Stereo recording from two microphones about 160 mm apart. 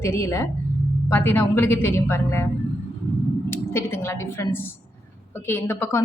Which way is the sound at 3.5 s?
15° left (ahead or behind).